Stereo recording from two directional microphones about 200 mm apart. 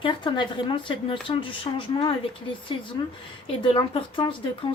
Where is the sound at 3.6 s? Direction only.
25° left (ahead or behind).